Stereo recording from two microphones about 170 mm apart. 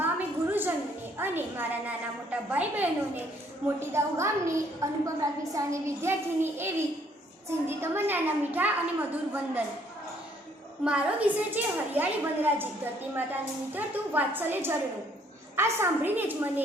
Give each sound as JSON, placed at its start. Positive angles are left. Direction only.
{"t": 0.0, "sound": "a sound", "side_deg": -10}
{"t": 1.2, "sound": "a woman's voice", "side_deg": -10}
{"t": 10.8, "sound": "a woman's voice", "side_deg": -5}